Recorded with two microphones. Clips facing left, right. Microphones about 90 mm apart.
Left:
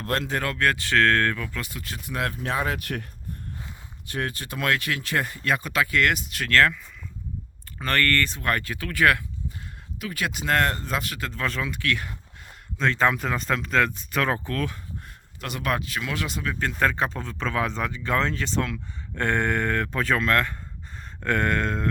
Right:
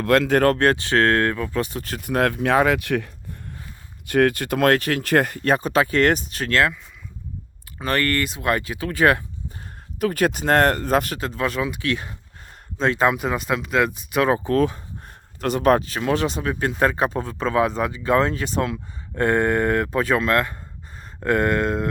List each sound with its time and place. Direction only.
0.0 s speech: 80° right; by 0.6 s 55° right (ahead or behind)
0.6 s speech: 25° right (ahead or behind)
2.0 s speech: 60° right (ahead or behind); by 3.0 s 90° right
4.1 s speech: 65° right (ahead or behind)
5.5 s speech: 35° right (ahead or behind)
6.5 s speech: 15° right (ahead or behind)
7.8 s speech: 10° right (ahead or behind); by 9.2 s 25° right (ahead or behind)
10.0 s speech: 45° right (ahead or behind)
11.2 s speech: 15° right (ahead or behind)
14.5 s speech: 25° right (ahead or behind)
16.6 s speech: 15° right (ahead or behind)